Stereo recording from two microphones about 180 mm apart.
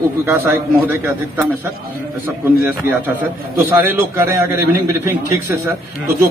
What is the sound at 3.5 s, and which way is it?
A man's voice, 10° right (ahead or behind).